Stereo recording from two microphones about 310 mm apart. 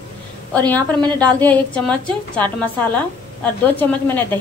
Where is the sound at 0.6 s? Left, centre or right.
Centre.